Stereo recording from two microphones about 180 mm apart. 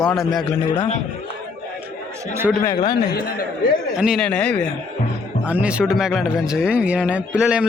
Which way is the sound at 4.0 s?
Centre (ahead or behind).